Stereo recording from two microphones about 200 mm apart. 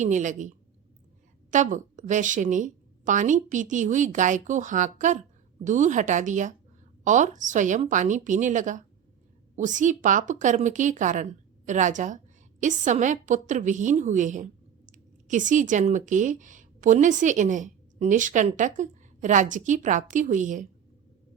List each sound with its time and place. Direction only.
0.0 s a woman's voice: 40° right (ahead or behind)